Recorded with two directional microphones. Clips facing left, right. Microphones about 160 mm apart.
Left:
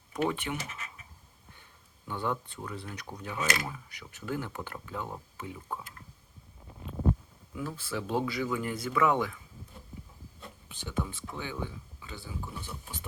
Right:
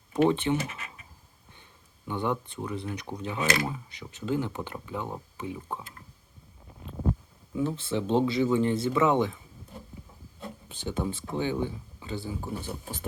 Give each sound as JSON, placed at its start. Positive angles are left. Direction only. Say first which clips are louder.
{"t": 0.1, "sound": "speech", "louder": "right 8 dB", "side_deg": -25}
{"t": 2.0, "sound": "speech", "louder": "right 4 dB", "side_deg": -20}
{"t": 7.5, "sound": "speech", "louder": "right 7 dB", "side_deg": -25}
{"t": 10.4, "sound": "speech", "louder": "right 8 dB", "side_deg": -30}